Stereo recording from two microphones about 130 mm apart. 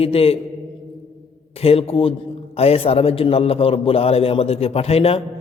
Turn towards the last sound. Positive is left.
turn(degrees=50)  # may be behind; listen again after turning